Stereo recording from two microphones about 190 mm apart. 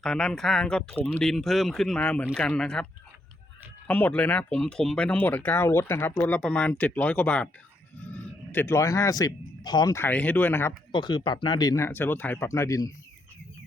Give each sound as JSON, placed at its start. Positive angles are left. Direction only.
{"t": 0.0, "sound": "speech", "side_deg": 5}
{"t": 3.8, "sound": "speech", "side_deg": 10}
{"t": 10.9, "sound": "speech", "side_deg": 25}